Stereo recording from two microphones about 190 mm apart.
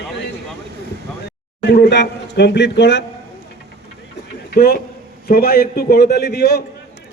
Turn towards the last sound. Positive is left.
turn(degrees=60)  # may be behind; listen again after turning